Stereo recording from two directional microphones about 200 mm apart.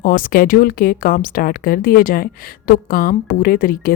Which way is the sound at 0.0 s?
45° left (ahead or behind).